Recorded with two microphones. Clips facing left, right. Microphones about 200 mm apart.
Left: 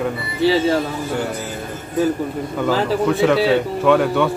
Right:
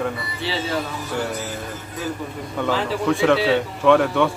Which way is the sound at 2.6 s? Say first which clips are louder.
Left 4 dB; centre (ahead or behind).